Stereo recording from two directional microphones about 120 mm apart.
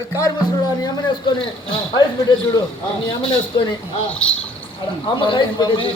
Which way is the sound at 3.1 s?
40° left (ahead or behind).